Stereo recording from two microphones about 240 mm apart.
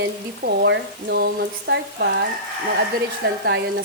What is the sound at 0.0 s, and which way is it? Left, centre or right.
Speech, right.